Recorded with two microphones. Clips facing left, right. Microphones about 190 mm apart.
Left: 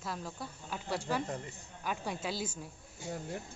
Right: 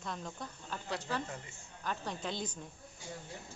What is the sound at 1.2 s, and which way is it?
Speech, 40° left (ahead or behind).